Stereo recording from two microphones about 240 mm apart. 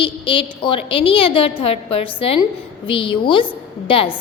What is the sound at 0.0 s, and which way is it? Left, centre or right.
A woman's voice, left.